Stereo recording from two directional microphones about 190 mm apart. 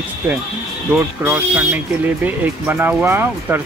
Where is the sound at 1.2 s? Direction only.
10° right (ahead or behind).